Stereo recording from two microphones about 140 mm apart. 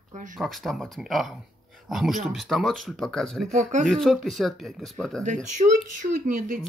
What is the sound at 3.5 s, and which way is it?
Speech, 60° right (ahead or behind).